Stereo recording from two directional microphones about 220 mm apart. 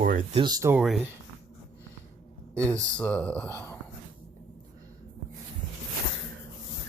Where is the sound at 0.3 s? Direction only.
20° right (ahead or behind).